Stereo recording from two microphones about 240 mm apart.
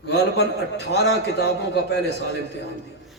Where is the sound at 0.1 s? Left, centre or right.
Left.